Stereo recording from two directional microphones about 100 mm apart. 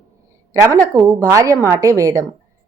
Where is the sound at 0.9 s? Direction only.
35° right (ahead or behind).